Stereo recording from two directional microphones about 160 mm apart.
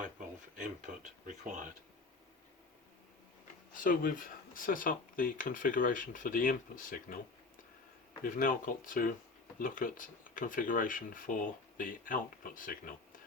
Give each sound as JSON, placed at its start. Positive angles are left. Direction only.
{"t": 0.5, "sound": "speech", "side_deg": -55}
{"t": 3.8, "sound": "speech", "side_deg": 60}
{"t": 8.2, "sound": "speech", "side_deg": 60}